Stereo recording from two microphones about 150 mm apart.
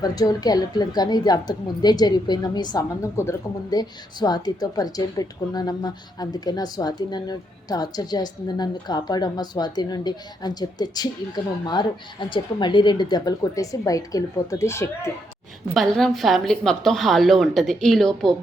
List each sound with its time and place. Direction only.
0.0 s speech: 25° left (ahead or behind)
15.7 s a woman's voice: centre (ahead or behind)